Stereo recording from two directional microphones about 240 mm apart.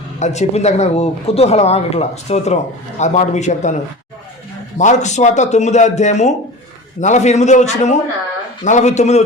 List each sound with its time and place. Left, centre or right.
0.2 s speech: left
4.8 s speech: left